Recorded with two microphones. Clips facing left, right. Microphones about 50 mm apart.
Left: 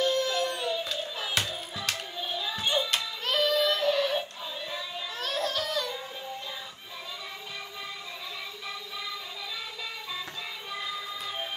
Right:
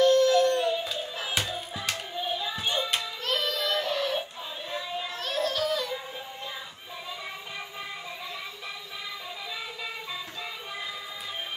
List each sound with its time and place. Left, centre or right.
0.0 s music: centre
1.8 s child singing: centre
4.6 s a sound: centre
5.2 s baby cry: centre
10.7 s music: centre